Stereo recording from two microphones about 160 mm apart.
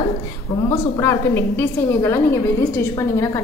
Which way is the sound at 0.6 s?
20° left (ahead or behind).